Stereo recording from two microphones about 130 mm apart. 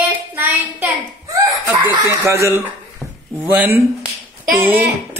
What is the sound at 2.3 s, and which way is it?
A man's voice, 20° right (ahead or behind).